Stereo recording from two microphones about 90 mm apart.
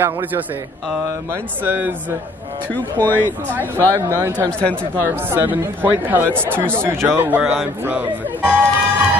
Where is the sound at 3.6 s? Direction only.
30° right (ahead or behind).